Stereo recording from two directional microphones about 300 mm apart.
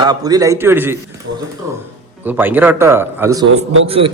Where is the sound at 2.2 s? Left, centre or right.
Centre.